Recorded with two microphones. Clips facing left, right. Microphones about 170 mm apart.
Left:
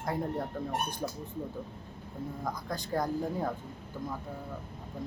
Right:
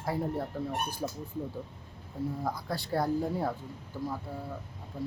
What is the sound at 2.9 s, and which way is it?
Speech, 10° right (ahead or behind).